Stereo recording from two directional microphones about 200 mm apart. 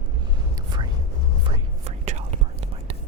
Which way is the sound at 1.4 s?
35° right (ahead or behind).